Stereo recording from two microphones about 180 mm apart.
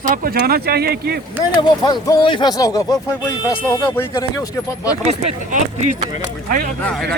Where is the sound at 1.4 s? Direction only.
20° left (ahead or behind).